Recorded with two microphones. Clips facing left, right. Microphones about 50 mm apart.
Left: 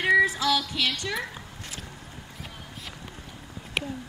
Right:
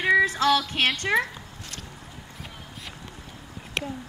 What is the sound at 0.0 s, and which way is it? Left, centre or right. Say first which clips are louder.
Music: right 1 dB; right.